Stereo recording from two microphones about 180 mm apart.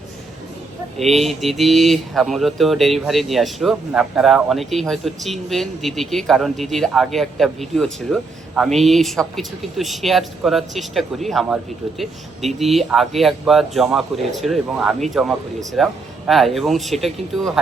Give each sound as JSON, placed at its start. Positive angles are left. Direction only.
{"t": 0.9, "sound": "speech", "side_deg": 0}